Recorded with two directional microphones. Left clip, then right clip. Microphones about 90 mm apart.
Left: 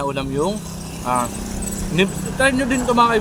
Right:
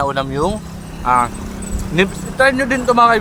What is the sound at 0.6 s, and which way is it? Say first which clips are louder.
Vehicle: right 1 dB; 35° left (ahead or behind).